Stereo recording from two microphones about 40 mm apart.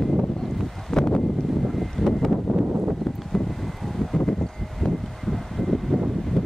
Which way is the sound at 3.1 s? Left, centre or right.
Centre.